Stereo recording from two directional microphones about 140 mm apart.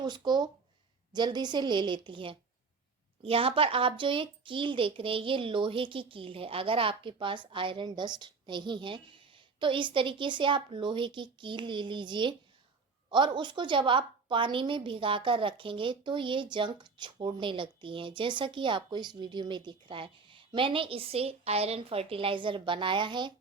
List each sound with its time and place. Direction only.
0.0 s a woman's voice: 30° right (ahead or behind)